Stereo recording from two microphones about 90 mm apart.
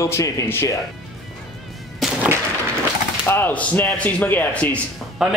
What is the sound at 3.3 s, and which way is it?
Speech, 25° left (ahead or behind).